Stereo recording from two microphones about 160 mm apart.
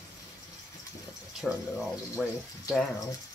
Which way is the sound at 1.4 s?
Centre (ahead or behind).